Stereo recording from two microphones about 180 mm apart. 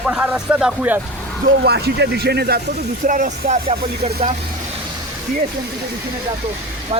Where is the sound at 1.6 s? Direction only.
65° right (ahead or behind).